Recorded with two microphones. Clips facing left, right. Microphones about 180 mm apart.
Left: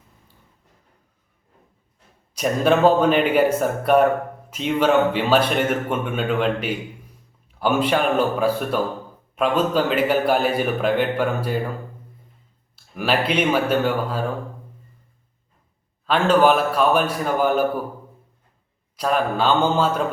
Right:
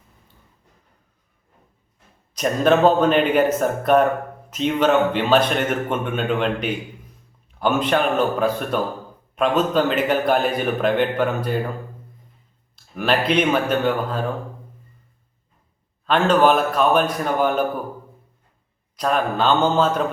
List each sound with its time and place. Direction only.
2.3 s a man's voice: 10° left (ahead or behind)
12.7 s a man's voice: 5° left (ahead or behind)
16.0 s a man's voice: 10° left (ahead or behind)
18.9 s a man's voice: 5° left (ahead or behind)